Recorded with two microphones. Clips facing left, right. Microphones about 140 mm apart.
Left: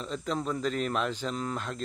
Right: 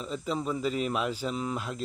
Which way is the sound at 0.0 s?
5° right (ahead or behind).